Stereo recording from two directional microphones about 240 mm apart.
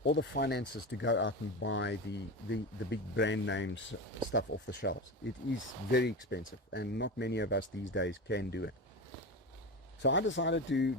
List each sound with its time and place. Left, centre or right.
0.0 s speech: left
10.0 s speech: left